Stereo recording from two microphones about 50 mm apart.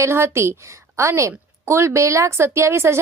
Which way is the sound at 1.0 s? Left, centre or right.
Right.